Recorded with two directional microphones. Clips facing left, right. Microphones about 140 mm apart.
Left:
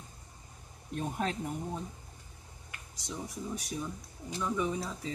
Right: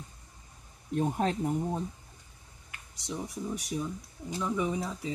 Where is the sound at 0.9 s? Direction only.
30° right (ahead or behind).